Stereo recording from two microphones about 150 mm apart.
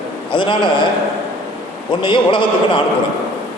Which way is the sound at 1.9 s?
30° left (ahead or behind).